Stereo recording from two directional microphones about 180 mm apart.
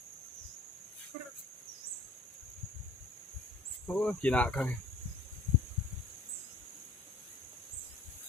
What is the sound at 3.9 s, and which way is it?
Speech, 5° left (ahead or behind).